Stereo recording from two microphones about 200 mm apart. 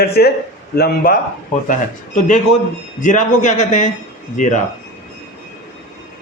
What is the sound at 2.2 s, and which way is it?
A man's voice, 35° left (ahead or behind).